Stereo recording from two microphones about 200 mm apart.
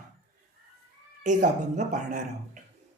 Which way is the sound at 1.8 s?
35° right (ahead or behind).